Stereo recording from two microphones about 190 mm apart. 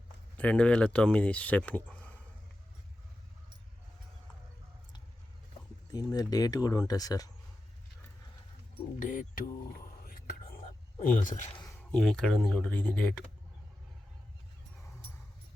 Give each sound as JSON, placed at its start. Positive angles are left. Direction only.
{"t": 0.3, "sound": "speech", "side_deg": 5}
{"t": 5.9, "sound": "speech", "side_deg": 20}
{"t": 9.0, "sound": "speech", "side_deg": 45}
{"t": 11.0, "sound": "speech", "side_deg": 45}
{"t": 11.5, "sound": "a sound", "side_deg": 20}
{"t": 11.9, "sound": "speech", "side_deg": 5}